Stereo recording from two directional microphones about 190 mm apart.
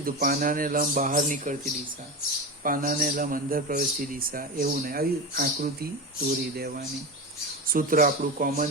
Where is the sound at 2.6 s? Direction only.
45° right (ahead or behind).